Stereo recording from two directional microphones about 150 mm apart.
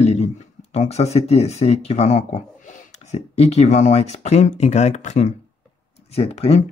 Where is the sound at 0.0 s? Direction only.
45° left (ahead or behind).